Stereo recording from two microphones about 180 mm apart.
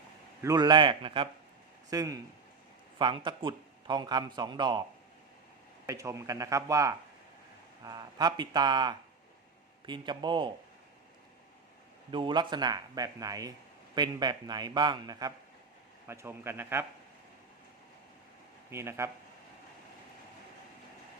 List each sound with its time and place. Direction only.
0.4 s a man's voice: 20° right (ahead or behind)
5.8 s a man's voice: 15° right (ahead or behind)
12.1 s a man's voice: 25° right (ahead or behind)
18.7 s speech: 15° right (ahead or behind)